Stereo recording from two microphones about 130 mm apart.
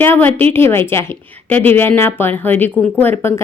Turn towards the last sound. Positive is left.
turn(degrees=20)  # may be behind; listen again after turning